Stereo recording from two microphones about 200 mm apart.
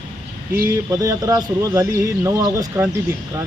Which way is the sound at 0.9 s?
20° right (ahead or behind).